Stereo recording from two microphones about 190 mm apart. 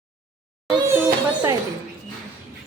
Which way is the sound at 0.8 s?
20° right (ahead or behind).